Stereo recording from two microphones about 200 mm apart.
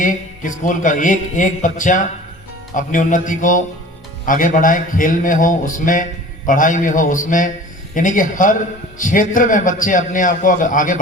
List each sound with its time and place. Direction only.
0.0 s a man's voice: 40° left (ahead or behind)